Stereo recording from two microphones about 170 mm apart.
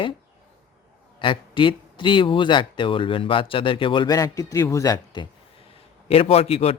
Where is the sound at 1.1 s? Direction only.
30° left (ahead or behind).